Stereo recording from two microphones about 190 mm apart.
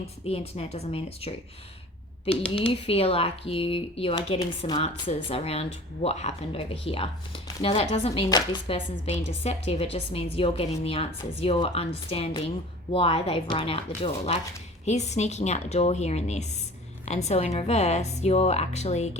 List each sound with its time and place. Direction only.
0.0 s a woman's voice: 30° left (ahead or behind)
2.5 s a woman's voice: 30° left (ahead or behind)